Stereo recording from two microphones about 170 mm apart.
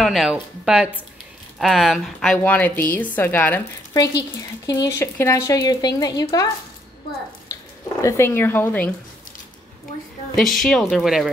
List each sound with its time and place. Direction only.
0.0 s a woman's voice: centre (ahead or behind); by 6.2 s 25° left (ahead or behind)
8.0 s a woman's voice: 15° left (ahead or behind)
10.3 s a woman's voice: centre (ahead or behind)